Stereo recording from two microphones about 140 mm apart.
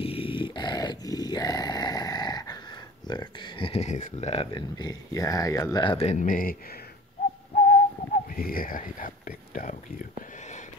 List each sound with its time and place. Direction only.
0.0 s dog: 40° left (ahead or behind)
3.1 s speech: 30° left (ahead or behind)
5.9 s speech: 45° left (ahead or behind)
6.1 s speech: 80° left
7.5 s whistling: 70° left (ahead or behind)